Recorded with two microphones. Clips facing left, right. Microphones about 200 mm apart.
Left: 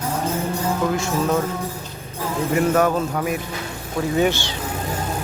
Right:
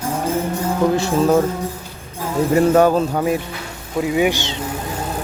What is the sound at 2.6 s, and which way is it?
Speech, 30° right (ahead or behind).